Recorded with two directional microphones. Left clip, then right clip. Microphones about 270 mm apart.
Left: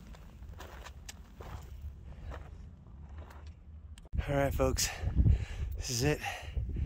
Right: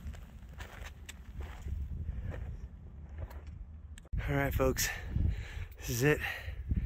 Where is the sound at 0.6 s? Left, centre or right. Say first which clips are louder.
Even; centre.